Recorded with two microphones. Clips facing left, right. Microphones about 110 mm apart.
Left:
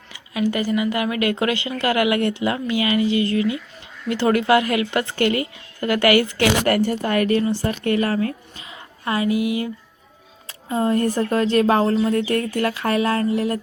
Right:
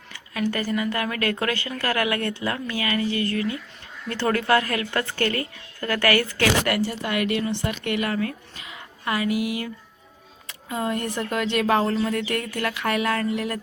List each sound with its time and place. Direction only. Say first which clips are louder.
0.1 s a woman's voice: left 4 dB; 10° left (ahead or behind)
6.7 s speech: left 5 dB; 45° left (ahead or behind); by 13.6 s 30° left (ahead or behind)